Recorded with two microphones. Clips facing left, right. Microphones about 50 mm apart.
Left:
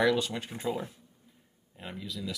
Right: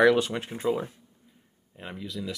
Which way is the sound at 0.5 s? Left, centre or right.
Centre.